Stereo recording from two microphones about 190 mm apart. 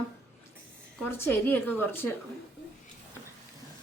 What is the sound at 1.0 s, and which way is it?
Speech, 10° left (ahead or behind).